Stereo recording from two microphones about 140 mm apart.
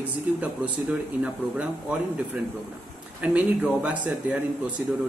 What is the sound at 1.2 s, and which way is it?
Speech, 5° right (ahead or behind).